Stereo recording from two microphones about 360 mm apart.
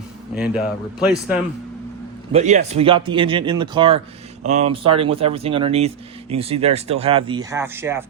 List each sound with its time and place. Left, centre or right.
0.3 s speech: centre
2.3 s speech: centre